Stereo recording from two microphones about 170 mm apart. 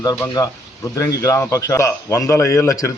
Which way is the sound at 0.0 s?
20° left (ahead or behind).